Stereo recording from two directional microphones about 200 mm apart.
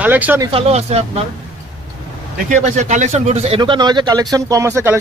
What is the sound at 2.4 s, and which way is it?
Speech, 35° right (ahead or behind).